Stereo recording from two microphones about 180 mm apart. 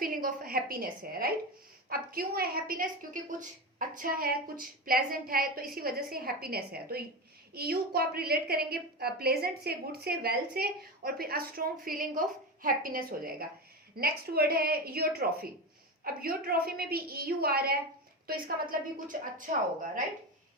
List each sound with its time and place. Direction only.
0.0 s a woman's voice: 50° right (ahead or behind)
18.7 s a woman's voice: 50° right (ahead or behind)